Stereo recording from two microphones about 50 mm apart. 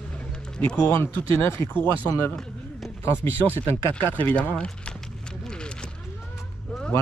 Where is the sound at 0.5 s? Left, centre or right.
Left.